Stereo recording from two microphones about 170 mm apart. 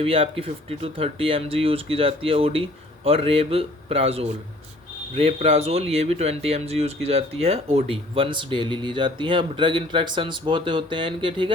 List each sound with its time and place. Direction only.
0.0 s speech: 35° right (ahead or behind)